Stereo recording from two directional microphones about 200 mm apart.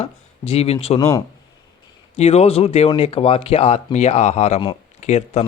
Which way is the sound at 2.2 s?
30° left (ahead or behind).